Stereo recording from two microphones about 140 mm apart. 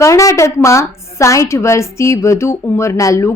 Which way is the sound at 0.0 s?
20° left (ahead or behind).